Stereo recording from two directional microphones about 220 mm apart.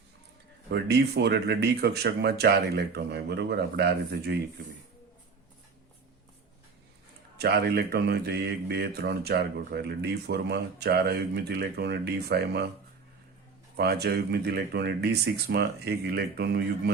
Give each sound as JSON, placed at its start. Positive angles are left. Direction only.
{"t": 0.7, "sound": "a man's voice", "side_deg": -50}
{"t": 7.3, "sound": "a man's voice", "side_deg": -45}
{"t": 13.7, "sound": "a man's voice", "side_deg": -45}